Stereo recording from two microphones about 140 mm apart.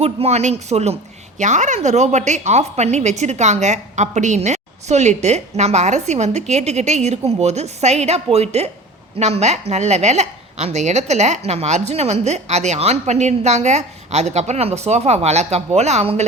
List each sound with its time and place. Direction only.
0.0 s a woman's voice: 50° right (ahead or behind)